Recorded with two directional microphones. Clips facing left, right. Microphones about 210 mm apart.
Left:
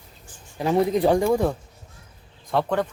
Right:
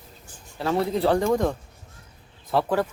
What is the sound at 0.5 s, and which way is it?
Speech, 15° left (ahead or behind).